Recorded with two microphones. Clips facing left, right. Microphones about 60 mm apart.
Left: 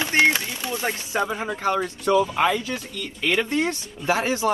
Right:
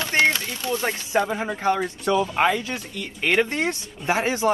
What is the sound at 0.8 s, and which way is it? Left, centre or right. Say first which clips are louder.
Speech: right 1 dB; right.